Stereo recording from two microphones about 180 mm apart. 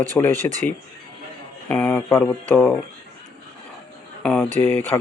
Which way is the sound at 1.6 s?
10° left (ahead or behind).